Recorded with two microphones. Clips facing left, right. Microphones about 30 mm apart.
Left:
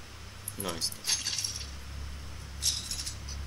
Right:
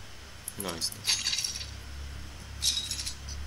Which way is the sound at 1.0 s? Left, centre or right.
Right.